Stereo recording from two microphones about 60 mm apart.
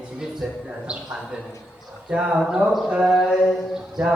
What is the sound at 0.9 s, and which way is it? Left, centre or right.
Mantra, centre.